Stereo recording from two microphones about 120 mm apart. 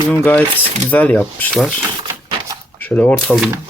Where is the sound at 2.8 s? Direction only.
15° left (ahead or behind).